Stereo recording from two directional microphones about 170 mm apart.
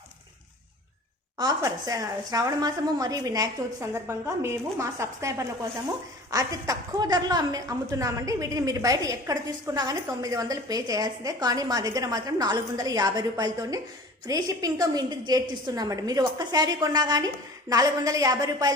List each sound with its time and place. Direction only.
1.4 s a woman's voice: 20° right (ahead or behind)